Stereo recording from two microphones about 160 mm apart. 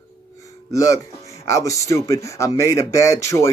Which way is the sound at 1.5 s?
20° left (ahead or behind).